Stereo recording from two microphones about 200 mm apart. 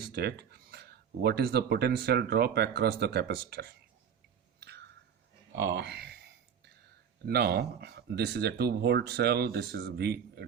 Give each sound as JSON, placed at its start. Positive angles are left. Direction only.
{"t": 0.0, "sound": "speech", "side_deg": -50}
{"t": 5.7, "sound": "speech", "side_deg": -55}
{"t": 7.3, "sound": "speech", "side_deg": -55}